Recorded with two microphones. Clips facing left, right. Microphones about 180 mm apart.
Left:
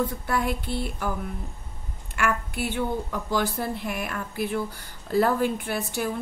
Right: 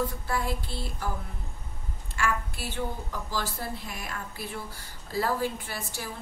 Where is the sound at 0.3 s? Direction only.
60° left (ahead or behind).